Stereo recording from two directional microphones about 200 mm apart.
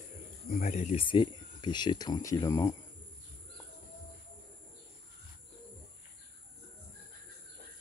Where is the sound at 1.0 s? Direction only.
25° left (ahead or behind).